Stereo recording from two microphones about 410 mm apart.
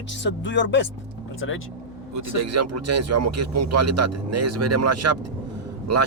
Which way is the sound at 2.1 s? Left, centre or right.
Right.